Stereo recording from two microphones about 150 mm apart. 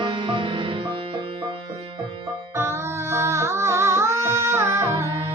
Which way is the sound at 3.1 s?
15° right (ahead or behind).